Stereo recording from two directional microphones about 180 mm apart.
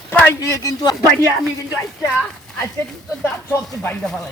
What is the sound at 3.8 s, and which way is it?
Speech, 10° left (ahead or behind).